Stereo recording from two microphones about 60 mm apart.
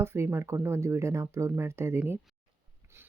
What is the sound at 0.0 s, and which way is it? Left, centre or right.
Speech, right.